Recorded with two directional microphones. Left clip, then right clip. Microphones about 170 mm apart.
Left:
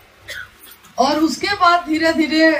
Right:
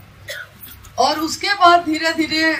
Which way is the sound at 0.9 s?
45° right (ahead or behind).